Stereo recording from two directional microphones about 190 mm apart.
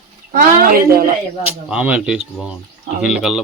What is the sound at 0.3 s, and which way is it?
Speech, 50° right (ahead or behind).